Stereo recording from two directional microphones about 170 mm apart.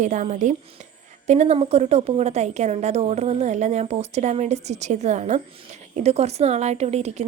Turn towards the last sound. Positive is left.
turn(degrees=-40)  # may be behind; listen again after turning